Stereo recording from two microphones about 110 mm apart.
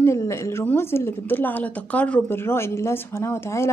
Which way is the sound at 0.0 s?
25° left (ahead or behind).